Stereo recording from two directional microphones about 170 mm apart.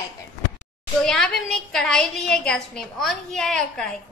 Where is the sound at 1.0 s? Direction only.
5° left (ahead or behind).